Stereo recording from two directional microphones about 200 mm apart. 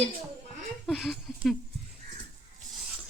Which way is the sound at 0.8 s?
Centre (ahead or behind).